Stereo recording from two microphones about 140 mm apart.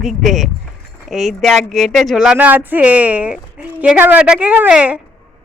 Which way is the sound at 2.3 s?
10° right (ahead or behind).